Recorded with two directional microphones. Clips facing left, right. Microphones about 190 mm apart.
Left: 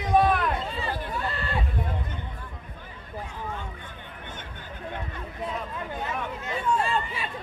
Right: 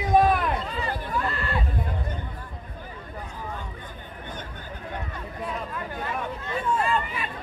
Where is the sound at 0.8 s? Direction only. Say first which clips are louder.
Right 2 dB; 25° left (ahead or behind).